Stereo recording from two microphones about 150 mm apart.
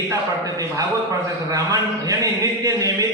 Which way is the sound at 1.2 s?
20° right (ahead or behind).